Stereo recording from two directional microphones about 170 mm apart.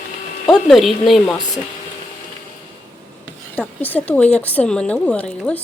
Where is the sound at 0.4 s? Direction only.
Centre (ahead or behind).